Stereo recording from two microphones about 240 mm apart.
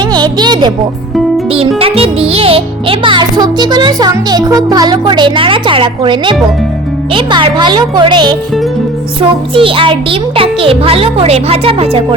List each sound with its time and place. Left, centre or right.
0.0 s a child's voice: centre
9.6 s a child's voice: right